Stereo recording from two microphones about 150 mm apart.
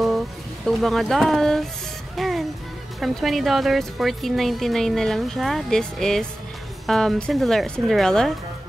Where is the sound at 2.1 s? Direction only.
Centre (ahead or behind).